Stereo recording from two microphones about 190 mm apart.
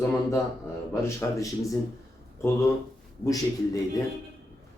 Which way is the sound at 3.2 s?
20° left (ahead or behind).